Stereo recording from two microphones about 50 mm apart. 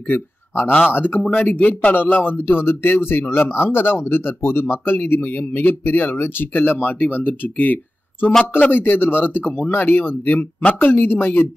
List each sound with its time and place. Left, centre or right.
0.1 s a man's voice: left
1.2 s speech: left
1.5 s speech: left
2.2 s speech: left